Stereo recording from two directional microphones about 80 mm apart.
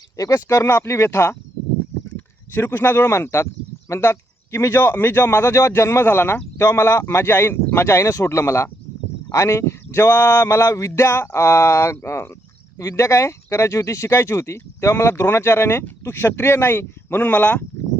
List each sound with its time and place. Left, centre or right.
0.2 s speech: left; by 17.7 s centre